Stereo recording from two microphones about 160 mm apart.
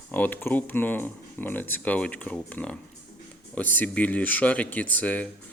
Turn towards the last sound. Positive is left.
turn(degrees=10)  # may be behind; listen again after turning